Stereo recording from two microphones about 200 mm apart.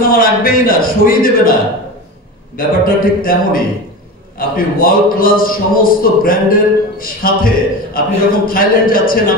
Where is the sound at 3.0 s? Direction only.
45° left (ahead or behind).